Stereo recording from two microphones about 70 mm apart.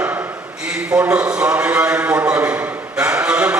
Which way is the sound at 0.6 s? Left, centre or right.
Centre.